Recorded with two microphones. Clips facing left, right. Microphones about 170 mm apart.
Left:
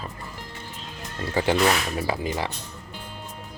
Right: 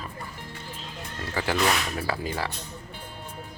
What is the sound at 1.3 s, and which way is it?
Speech, 25° left (ahead or behind).